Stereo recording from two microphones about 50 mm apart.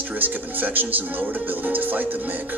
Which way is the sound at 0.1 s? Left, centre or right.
Right.